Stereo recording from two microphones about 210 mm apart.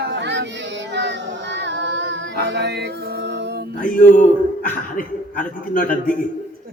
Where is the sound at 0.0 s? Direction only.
55° right (ahead or behind).